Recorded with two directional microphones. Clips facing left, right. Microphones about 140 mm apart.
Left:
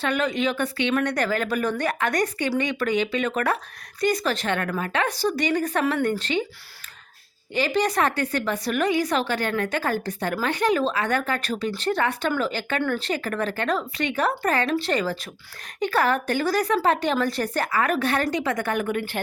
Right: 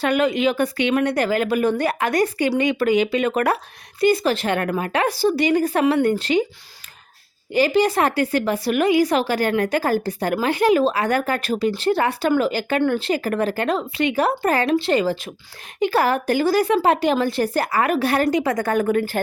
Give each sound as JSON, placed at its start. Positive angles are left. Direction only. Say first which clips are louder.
{"t": 0.0, "sound": "a woman's voice", "louder": "right 5 dB", "side_deg": -35}
{"t": 7.5, "sound": "a woman's voice", "louder": "right 5 dB", "side_deg": -35}